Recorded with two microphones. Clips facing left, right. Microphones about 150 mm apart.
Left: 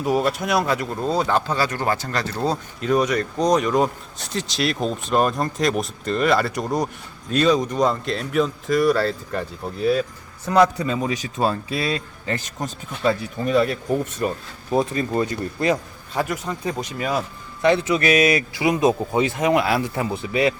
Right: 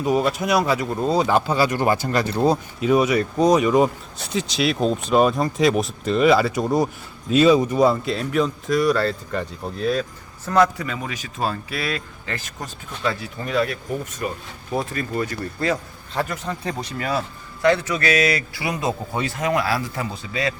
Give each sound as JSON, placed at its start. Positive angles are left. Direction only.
{"t": 0.0, "sound": "speech", "side_deg": 0}
{"t": 10.8, "sound": "a man's voice", "side_deg": 30}